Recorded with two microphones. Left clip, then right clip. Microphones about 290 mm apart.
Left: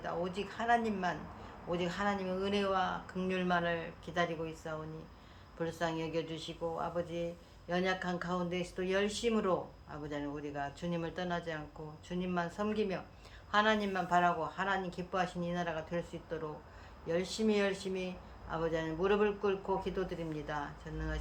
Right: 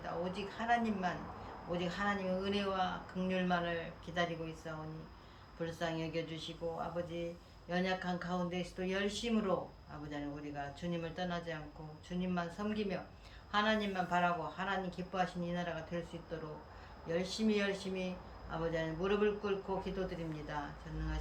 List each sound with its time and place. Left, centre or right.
0.0 s a woman's voice: centre